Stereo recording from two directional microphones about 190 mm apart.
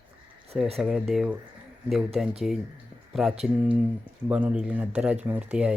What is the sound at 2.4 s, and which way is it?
Speech, centre (ahead or behind).